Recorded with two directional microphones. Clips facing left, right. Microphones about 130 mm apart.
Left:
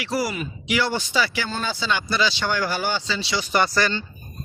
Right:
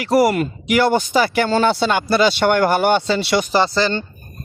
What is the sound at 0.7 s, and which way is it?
Speech, 50° right (ahead or behind).